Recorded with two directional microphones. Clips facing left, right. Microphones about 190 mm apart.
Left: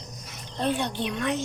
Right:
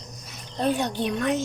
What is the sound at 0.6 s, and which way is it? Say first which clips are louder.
Speech: right 3 dB; 45° right (ahead or behind).